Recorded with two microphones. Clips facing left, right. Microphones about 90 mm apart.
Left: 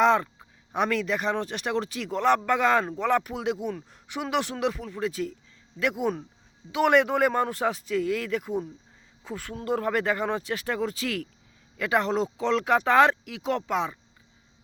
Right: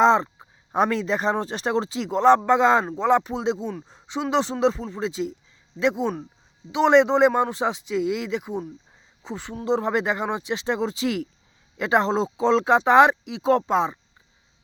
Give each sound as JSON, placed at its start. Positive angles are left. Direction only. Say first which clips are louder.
{"t": 0.0, "sound": "speech", "louder": "right 3 dB", "side_deg": -25}
{"t": 13.4, "sound": "speech", "louder": "right 7 dB", "side_deg": -35}